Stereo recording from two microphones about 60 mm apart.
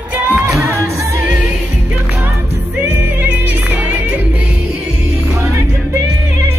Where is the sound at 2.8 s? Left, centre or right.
Right.